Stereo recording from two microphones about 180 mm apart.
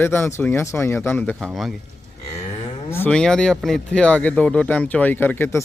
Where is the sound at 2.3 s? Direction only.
35° left (ahead or behind).